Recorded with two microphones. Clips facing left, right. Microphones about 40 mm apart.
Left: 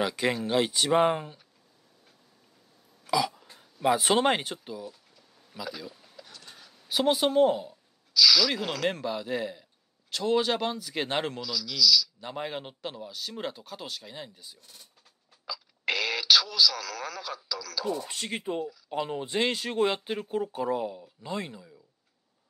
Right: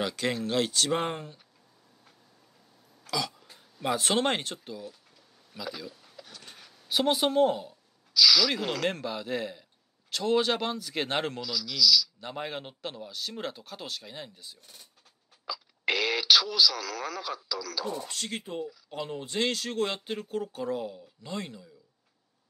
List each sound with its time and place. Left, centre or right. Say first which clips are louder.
0.0 s speech: left 2 dB; centre
3.1 s throat clearing: left 5 dB; centre
3.8 s speech: left 4 dB; centre
6.1 s a sound: right 1 dB; centre
6.9 s speech: left 1 dB; centre
15.4 s radio: right 1 dB; centre
17.5 s speech: right 1 dB; centre
18.0 s speech: left 3 dB; centre